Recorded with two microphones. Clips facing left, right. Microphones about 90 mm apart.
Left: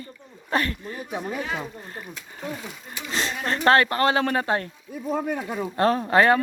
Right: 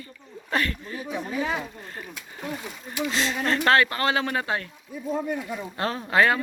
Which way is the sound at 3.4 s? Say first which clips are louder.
Left 2 dB; 30° left (ahead or behind).